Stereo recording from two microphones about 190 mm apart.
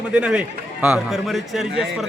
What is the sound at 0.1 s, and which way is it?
A man's voice, 5° right (ahead or behind).